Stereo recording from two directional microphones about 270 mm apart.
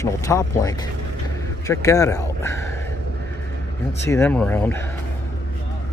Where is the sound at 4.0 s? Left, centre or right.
Centre.